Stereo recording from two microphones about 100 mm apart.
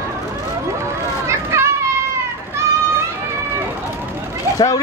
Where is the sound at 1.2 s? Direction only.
30° right (ahead or behind).